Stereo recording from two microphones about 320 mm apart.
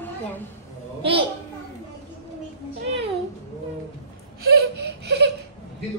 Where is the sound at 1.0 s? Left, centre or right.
Centre.